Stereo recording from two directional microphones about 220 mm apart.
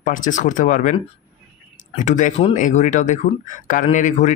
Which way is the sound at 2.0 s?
35° left (ahead or behind).